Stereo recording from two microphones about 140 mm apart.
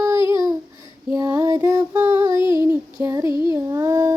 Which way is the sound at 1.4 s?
20° right (ahead or behind).